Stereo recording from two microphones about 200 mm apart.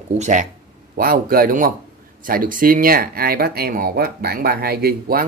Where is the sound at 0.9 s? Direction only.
50° right (ahead or behind).